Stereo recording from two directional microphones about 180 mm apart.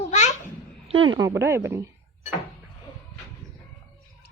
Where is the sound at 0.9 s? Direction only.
30° right (ahead or behind).